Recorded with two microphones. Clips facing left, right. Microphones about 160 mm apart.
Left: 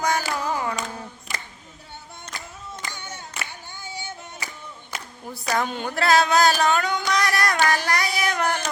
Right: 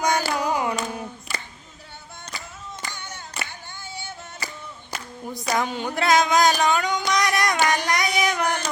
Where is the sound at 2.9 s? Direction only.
10° left (ahead or behind).